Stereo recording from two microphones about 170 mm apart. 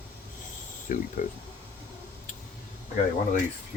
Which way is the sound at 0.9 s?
55° left (ahead or behind).